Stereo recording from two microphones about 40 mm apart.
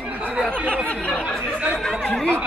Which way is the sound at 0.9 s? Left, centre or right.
Left.